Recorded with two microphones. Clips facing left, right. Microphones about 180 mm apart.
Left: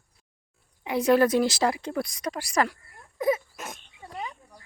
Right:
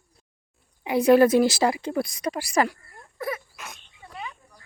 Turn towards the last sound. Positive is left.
turn(degrees=40)  # may be behind; listen again after turning